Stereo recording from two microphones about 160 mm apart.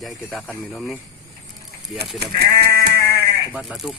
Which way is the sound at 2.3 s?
85° right.